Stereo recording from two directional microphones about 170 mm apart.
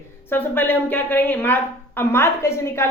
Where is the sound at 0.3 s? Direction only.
10° left (ahead or behind).